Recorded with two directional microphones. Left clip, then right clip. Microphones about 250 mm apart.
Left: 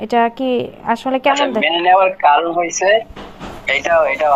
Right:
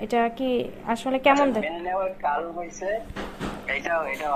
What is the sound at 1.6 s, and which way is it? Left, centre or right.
Speech, left.